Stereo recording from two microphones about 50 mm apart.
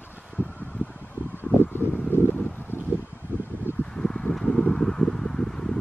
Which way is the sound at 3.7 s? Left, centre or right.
Left.